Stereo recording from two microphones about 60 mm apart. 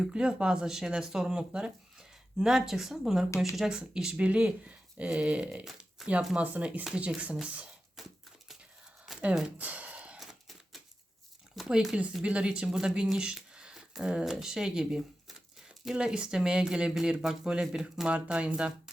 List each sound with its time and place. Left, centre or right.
0.0 s speech: centre
5.6 s a sound: centre
6.3 s speech: right
9.1 s a sound: centre
9.6 s gasp: right
11.7 s speech: centre